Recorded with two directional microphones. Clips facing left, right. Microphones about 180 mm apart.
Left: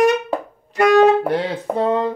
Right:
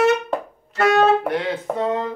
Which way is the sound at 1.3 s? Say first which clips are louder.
Left 2 dB; 35° left (ahead or behind).